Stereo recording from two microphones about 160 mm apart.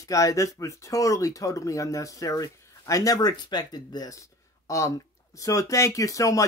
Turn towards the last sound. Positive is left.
turn(degrees=20)  # may be behind; listen again after turning